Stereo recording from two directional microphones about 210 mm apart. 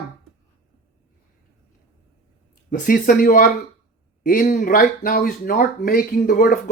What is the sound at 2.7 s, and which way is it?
A man's voice, 45° left (ahead or behind).